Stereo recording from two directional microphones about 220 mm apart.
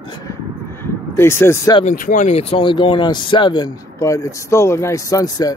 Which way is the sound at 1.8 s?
35° left (ahead or behind).